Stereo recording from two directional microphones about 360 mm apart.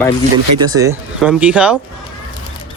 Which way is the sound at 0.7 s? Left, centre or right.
Centre.